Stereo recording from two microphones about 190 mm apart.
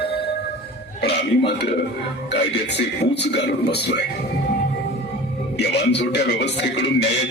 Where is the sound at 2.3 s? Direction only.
65° left (ahead or behind).